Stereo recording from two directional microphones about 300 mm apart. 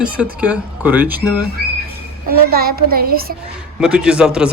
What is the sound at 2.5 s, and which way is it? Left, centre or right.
Speech, right.